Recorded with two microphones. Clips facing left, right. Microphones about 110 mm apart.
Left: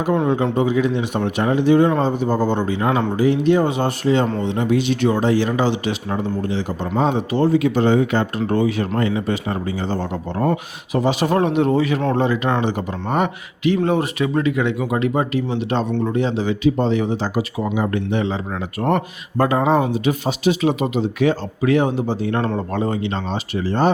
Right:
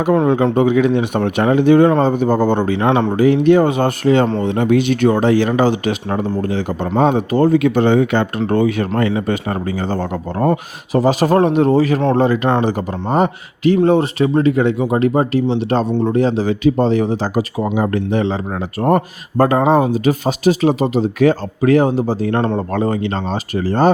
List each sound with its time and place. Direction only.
0.5 s speech: 60° right (ahead or behind)
3.2 s a man's voice: 55° right (ahead or behind)
12.6 s a man's voice: 40° right (ahead or behind)